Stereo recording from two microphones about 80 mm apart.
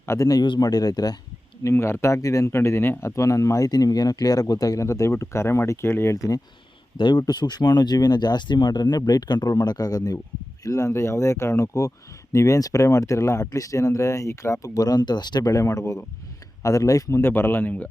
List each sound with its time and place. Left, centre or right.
0.0 s speech: left
0.6 s speech: left
1.6 s speech: left
3.1 s speech: left
6.9 s speech: left
9.5 s speech: left
15.5 s speech: left
16.6 s speech: left